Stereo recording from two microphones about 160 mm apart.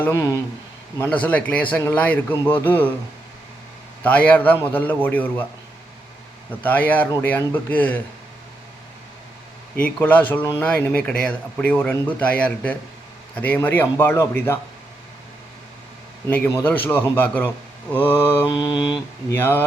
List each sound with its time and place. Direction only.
0.0 s mantra: 20° left (ahead or behind)
0.9 s speech: 10° left (ahead or behind)
4.0 s speech: 10° left (ahead or behind)
6.6 s speech: 10° left (ahead or behind)
9.7 s speech: 10° left (ahead or behind)
16.2 s speech: 15° left (ahead or behind)
18.4 s mantra: 25° left (ahead or behind)
19.3 s speech: 15° left (ahead or behind)